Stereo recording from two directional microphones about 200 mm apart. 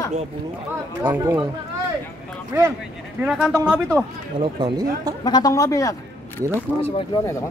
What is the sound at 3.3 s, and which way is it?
Speech, 5° right (ahead or behind).